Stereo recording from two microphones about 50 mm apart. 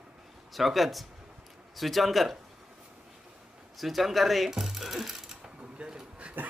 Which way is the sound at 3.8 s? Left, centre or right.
Centre.